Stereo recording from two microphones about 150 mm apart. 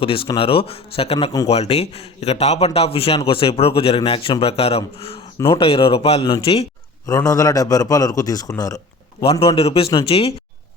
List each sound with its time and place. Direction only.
0.0 s a man's voice: 35° left (ahead or behind)
7.1 s a man's voice: 20° left (ahead or behind)
9.2 s a man's voice: 40° left (ahead or behind)